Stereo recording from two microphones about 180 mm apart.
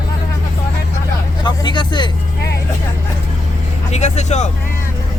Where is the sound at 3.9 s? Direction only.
40° left (ahead or behind).